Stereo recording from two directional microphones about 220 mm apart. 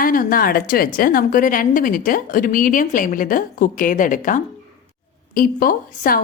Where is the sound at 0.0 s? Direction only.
40° left (ahead or behind).